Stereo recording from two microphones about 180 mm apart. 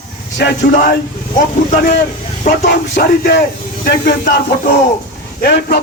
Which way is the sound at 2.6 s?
70° left (ahead or behind).